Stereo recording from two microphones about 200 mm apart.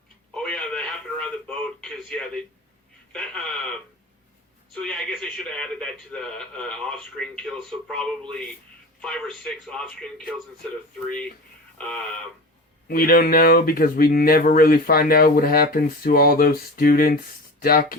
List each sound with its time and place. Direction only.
0.3 s radio: 5° left (ahead or behind)
3.1 s speech: 5° left (ahead or behind)
4.7 s speech: 5° left (ahead or behind)
11.8 s speech: 5° left (ahead or behind)
12.9 s speech: 45° left (ahead or behind)